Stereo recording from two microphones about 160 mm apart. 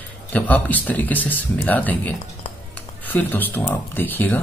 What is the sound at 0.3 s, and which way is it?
Speech, 10° left (ahead or behind).